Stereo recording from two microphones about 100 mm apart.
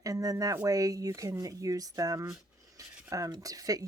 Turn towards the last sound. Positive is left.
turn(degrees=-35)  # may be behind; listen again after turning